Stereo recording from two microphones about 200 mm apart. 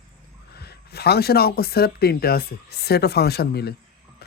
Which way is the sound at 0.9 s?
50° left (ahead or behind).